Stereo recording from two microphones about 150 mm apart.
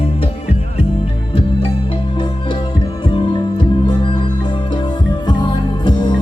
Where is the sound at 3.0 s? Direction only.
35° left (ahead or behind).